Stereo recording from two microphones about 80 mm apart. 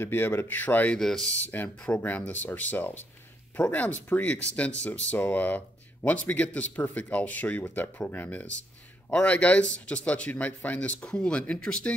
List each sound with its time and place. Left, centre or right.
0.0 s speech: left
0.9 s a man's voice: centre
1.3 s a man's voice: left